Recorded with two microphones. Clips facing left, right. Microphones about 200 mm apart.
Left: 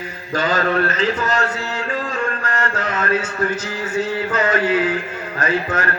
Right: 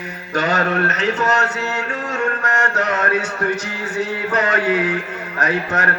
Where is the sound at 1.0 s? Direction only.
70° right (ahead or behind).